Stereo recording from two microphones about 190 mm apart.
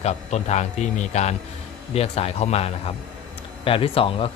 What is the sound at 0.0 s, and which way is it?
A man's voice, 35° left (ahead or behind).